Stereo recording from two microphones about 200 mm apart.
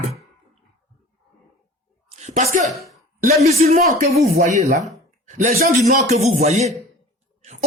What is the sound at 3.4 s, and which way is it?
Music, 30° right (ahead or behind).